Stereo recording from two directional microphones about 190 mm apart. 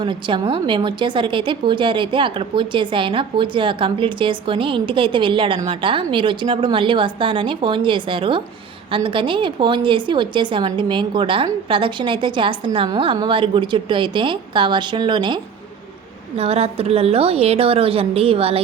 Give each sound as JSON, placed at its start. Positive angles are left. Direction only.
{"t": 0.0, "sound": "a woman's voice", "side_deg": -25}
{"t": 16.4, "sound": "a woman's voice", "side_deg": -30}